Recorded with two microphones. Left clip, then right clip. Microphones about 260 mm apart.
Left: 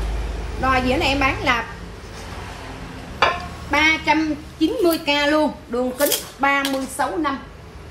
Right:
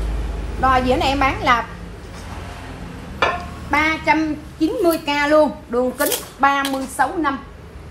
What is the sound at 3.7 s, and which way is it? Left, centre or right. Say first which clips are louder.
A child's voice: even; centre.